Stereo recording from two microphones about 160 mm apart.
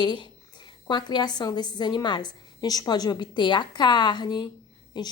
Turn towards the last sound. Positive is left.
turn(degrees=25)  # may be behind; listen again after turning